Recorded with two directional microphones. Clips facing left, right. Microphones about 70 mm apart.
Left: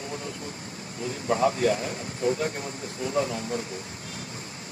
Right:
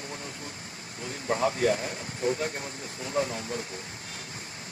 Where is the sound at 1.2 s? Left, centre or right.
Left.